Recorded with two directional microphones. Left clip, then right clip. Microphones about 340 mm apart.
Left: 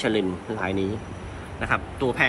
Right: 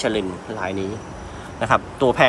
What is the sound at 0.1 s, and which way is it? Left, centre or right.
Speech, right.